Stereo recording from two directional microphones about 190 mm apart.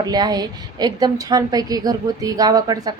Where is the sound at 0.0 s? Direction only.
20° right (ahead or behind).